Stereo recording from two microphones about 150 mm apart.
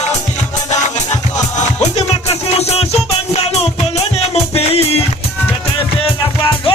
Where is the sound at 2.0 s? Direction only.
45° left (ahead or behind).